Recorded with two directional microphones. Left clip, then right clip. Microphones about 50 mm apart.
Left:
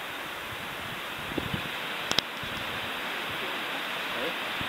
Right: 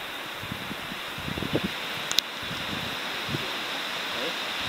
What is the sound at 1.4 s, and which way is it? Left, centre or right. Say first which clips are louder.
Rustling leaves: right 3 dB; centre.